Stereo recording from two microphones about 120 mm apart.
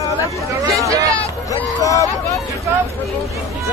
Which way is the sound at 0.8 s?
25° right (ahead or behind).